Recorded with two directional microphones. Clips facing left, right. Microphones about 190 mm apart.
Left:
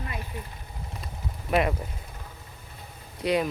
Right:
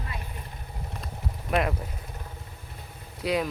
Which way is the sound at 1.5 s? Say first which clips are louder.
Left 2 dB; centre (ahead or behind).